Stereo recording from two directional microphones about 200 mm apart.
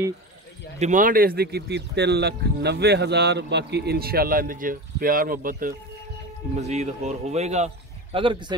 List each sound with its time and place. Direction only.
0.7 s speech: 40° right (ahead or behind)